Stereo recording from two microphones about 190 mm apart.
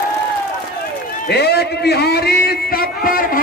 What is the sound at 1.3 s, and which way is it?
A man's voice, 60° left (ahead or behind).